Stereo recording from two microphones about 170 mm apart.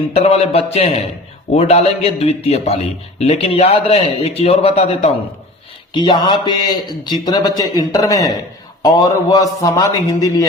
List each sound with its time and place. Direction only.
0.1 s a man's voice: 40° left (ahead or behind)
5.9 s a man's voice: 25° left (ahead or behind)